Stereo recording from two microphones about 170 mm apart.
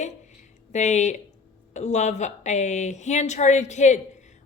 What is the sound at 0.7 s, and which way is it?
Speech, 45° left (ahead or behind).